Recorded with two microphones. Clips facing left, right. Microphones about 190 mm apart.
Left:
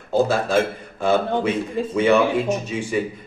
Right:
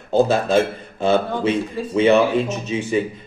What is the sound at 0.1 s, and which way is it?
Speech, 20° right (ahead or behind).